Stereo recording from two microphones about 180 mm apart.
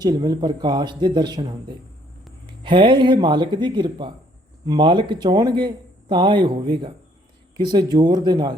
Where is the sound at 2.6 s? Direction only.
25° right (ahead or behind).